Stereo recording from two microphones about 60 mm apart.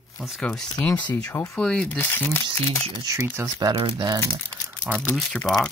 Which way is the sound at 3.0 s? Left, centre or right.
Right.